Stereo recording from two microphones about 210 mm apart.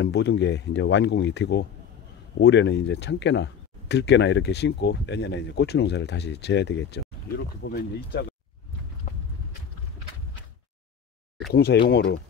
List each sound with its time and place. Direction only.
0.0 s speech: 55° left (ahead or behind)
11.5 s speech: 50° left (ahead or behind)
11.9 s speech: 60° left (ahead or behind)